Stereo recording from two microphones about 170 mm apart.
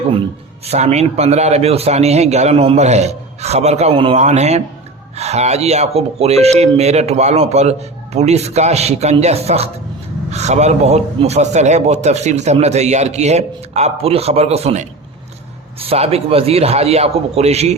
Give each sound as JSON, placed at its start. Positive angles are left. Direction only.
{"t": 0.6, "sound": "speech", "side_deg": -40}